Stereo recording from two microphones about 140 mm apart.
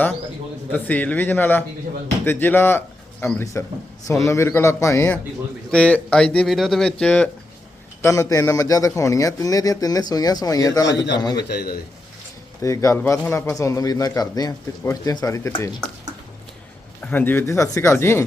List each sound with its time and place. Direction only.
0.7 s a man's voice: 10° left (ahead or behind)
8.0 s a man's voice: 20° left (ahead or behind)
12.6 s a man's voice: 25° left (ahead or behind)
17.1 s a man's voice: 15° left (ahead or behind)